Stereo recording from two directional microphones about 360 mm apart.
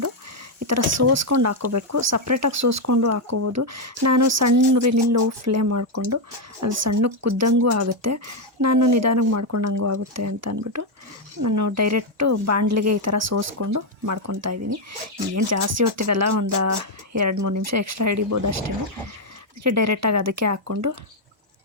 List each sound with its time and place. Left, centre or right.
0.6 s speech: right
19.6 s speech: right